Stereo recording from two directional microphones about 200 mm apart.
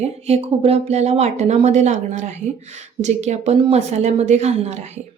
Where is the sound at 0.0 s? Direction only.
30° right (ahead or behind).